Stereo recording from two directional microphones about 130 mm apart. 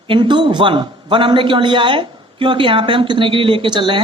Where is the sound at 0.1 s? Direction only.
40° right (ahead or behind).